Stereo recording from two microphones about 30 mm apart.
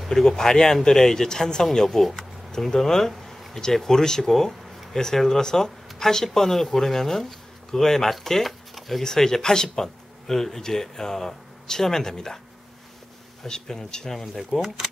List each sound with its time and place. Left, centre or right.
0.1 s speech: centre
8.5 s a sound: centre
9.0 s speech: centre
13.5 s speech: centre
14.1 s speech: centre